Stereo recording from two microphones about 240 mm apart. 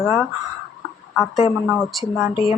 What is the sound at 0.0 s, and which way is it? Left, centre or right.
Speech, centre.